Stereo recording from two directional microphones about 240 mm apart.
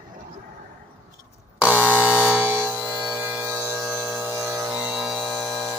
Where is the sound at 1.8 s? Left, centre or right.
Centre.